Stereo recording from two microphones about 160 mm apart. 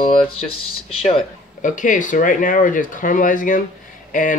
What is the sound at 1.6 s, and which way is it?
Speech, 55° left (ahead or behind).